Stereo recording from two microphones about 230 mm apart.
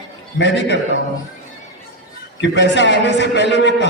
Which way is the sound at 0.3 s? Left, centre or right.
Left.